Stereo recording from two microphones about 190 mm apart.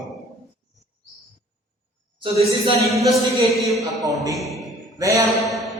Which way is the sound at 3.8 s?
15° right (ahead or behind).